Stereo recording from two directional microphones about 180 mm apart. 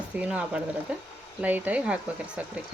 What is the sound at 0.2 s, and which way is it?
Speech, 5° right (ahead or behind).